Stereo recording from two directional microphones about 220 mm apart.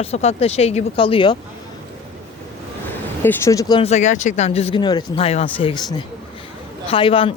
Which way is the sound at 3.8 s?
30° left (ahead or behind).